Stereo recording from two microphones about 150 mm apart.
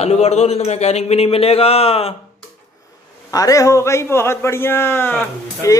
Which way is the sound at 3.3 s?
25° left (ahead or behind).